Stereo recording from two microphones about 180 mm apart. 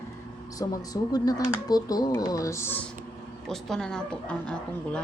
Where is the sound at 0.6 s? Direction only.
20° left (ahead or behind).